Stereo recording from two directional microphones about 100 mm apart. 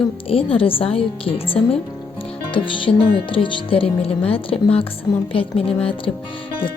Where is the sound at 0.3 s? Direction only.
70° left (ahead or behind).